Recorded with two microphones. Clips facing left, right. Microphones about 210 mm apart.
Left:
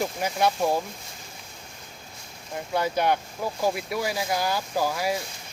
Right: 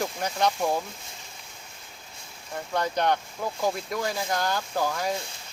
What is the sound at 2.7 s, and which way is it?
Speech, 10° left (ahead or behind).